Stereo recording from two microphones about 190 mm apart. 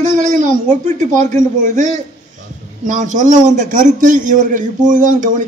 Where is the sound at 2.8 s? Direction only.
40° right (ahead or behind).